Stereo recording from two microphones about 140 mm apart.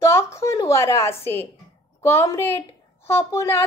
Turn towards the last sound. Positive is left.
turn(degrees=20)  # may be behind; listen again after turning